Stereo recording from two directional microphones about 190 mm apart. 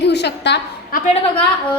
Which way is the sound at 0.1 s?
65° left (ahead or behind).